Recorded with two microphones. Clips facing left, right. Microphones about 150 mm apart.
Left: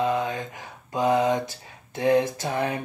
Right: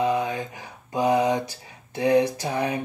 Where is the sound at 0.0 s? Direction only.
15° right (ahead or behind).